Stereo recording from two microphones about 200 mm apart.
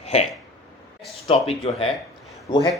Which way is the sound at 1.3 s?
30° left (ahead or behind).